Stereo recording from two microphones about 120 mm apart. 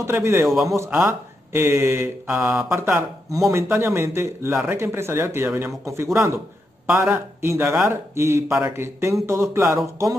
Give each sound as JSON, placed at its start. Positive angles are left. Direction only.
{"t": 0.0, "sound": "speech", "side_deg": -20}